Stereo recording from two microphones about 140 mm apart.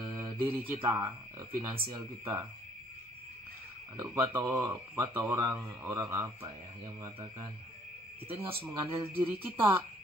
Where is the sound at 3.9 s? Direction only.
25° right (ahead or behind).